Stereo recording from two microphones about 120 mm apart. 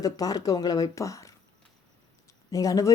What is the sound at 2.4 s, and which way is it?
Speech, 30° left (ahead or behind).